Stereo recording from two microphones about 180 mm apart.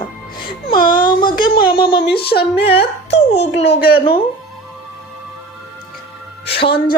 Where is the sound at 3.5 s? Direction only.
35° left (ahead or behind).